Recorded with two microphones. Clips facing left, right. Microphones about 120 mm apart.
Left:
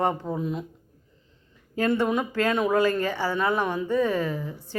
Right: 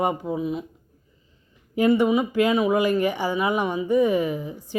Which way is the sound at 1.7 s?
15° right (ahead or behind).